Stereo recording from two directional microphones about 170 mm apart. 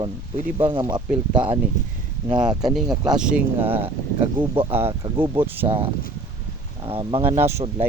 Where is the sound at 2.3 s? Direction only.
5° right (ahead or behind).